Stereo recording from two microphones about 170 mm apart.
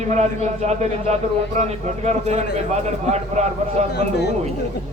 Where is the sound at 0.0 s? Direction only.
40° right (ahead or behind).